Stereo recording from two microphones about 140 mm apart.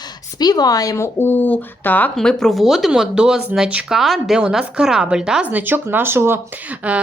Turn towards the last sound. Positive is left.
turn(degrees=-10)  # may be behind; listen again after turning